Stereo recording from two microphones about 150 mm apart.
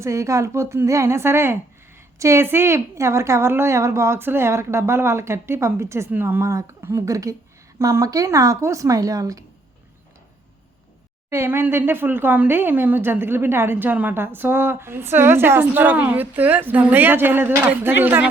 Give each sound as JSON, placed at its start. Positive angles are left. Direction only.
{"t": 0.0, "sound": "a woman's voice", "side_deg": -20}
{"t": 11.3, "sound": "speech", "side_deg": -15}